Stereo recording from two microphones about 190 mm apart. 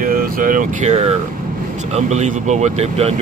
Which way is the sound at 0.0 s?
50° right (ahead or behind).